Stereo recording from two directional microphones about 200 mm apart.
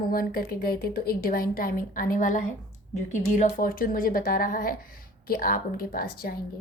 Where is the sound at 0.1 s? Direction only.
45° left (ahead or behind).